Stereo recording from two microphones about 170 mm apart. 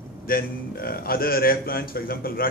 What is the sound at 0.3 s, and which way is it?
A man's voice, 60° left (ahead or behind).